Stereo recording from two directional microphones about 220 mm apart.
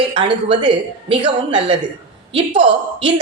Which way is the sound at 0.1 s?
25° right (ahead or behind).